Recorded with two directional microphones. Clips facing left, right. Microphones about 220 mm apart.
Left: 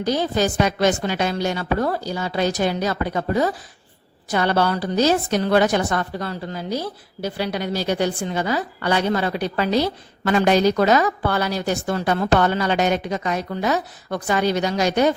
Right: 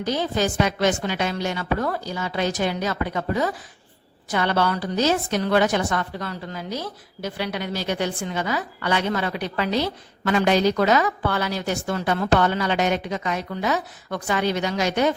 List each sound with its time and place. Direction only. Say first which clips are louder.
0.0 s a woman's voice: left 3 dB; 40° left (ahead or behind)